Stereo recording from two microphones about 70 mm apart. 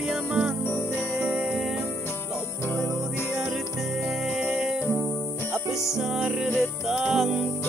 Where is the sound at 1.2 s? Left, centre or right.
Right.